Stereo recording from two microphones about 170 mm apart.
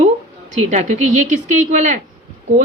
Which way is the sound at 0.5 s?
40° right (ahead or behind).